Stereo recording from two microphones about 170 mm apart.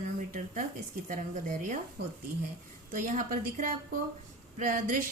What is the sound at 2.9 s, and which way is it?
A woman's voice, 50° right (ahead or behind).